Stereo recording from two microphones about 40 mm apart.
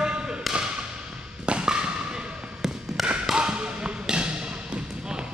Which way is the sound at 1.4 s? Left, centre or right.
Right.